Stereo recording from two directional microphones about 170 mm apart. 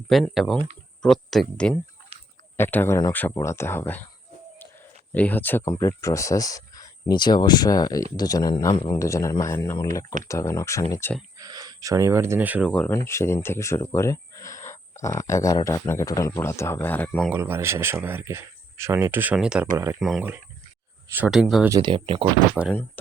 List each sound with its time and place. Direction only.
0.1 s speech: centre (ahead or behind)
5.1 s speech: 10° left (ahead or behind)
11.3 s speech: 20° right (ahead or behind)
12.7 s speech: 5° left (ahead or behind)
17.3 s speech: 15° right (ahead or behind)
19.7 s speech: 15° right (ahead or behind)
20.0 s speech: centre (ahead or behind)
21.7 s speech: 25° right (ahead or behind)
22.6 s speech: centre (ahead or behind)